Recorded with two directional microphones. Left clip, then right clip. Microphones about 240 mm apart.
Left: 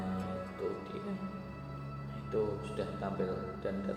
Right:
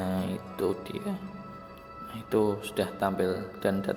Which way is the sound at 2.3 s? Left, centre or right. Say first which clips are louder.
Right 8 dB; right.